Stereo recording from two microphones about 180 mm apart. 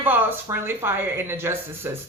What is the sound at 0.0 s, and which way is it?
A woman's voice, 10° right (ahead or behind).